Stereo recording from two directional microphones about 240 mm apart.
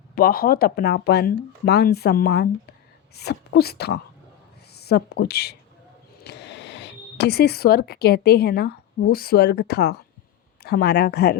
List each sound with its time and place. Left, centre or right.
0.2 s speech: left